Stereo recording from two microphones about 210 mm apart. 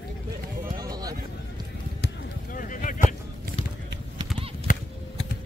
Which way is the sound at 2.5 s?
40° left (ahead or behind).